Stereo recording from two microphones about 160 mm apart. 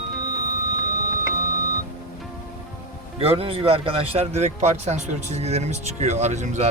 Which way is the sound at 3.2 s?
35° right (ahead or behind).